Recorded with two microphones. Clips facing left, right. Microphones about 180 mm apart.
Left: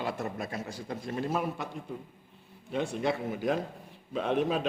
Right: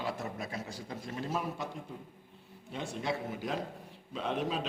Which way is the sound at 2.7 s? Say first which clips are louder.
Left 6 dB; 60° left (ahead or behind).